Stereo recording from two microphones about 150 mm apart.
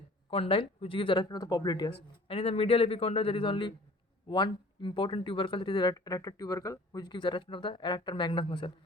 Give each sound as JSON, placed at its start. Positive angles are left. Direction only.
{"t": 0.3, "sound": "speech", "side_deg": 35}